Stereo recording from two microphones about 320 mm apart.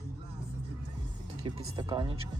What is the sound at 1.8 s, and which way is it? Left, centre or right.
Speech, centre.